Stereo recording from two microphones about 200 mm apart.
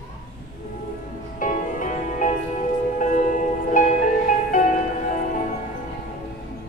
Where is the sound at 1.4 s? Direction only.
40° left (ahead or behind).